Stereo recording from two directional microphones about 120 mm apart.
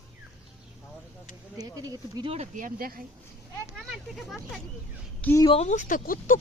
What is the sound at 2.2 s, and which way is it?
Speech, 65° right (ahead or behind).